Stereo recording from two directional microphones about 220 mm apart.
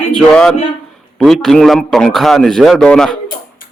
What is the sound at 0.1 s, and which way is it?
A man's voice, 5° left (ahead or behind).